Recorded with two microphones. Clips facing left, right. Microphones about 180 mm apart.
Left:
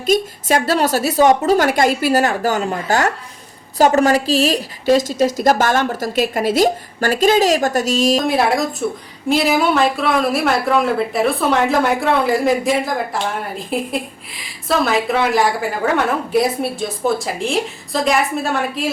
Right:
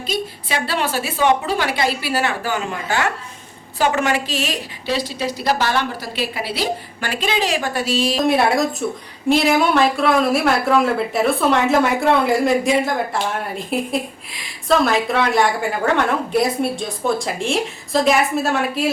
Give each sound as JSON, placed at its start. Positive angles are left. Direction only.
{"t": 0.0, "sound": "a woman's voice", "side_deg": 45}
{"t": 8.1, "sound": "speech", "side_deg": 0}